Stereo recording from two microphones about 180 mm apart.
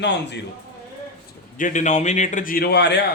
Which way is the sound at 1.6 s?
40° left (ahead or behind).